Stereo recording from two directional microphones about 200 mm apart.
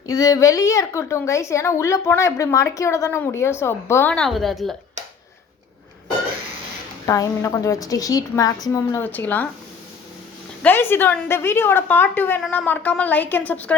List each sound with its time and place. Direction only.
0.1 s a woman's voice: 15° left (ahead or behind); by 4.7 s centre (ahead or behind)
7.0 s a woman's voice: 15° left (ahead or behind)
10.6 s a woman's voice: 10° left (ahead or behind)